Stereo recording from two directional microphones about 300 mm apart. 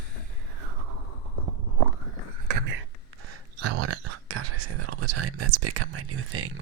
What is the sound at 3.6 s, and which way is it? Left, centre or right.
Speech, right.